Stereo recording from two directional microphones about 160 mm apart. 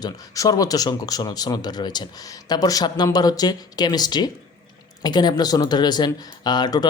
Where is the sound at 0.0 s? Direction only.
20° left (ahead or behind).